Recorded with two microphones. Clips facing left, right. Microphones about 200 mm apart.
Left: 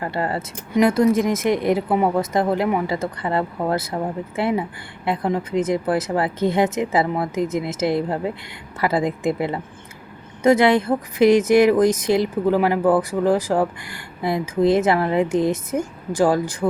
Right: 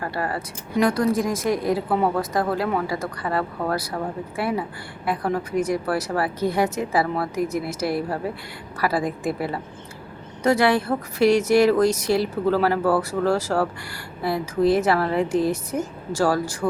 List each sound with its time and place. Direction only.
0.0 s a woman's voice: 20° left (ahead or behind)